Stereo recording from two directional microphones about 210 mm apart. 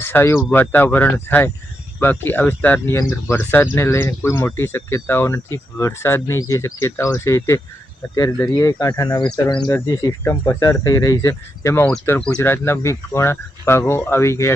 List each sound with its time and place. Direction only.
0.0 s speech: 10° left (ahead or behind)